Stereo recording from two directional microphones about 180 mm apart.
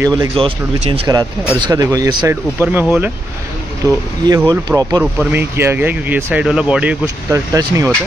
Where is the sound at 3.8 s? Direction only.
20° right (ahead or behind).